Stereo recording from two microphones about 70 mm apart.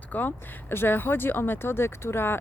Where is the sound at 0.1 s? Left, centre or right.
Left.